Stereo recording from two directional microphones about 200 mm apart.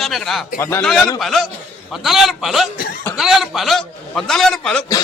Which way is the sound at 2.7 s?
45° left (ahead or behind).